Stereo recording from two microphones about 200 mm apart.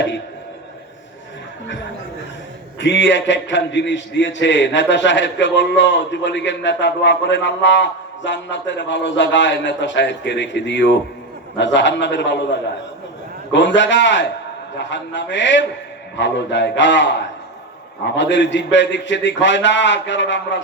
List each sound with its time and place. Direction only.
2.8 s a man's voice: 65° left (ahead or behind)